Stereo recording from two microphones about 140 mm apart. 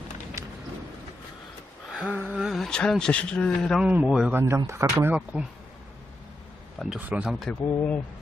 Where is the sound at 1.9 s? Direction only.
5° right (ahead or behind).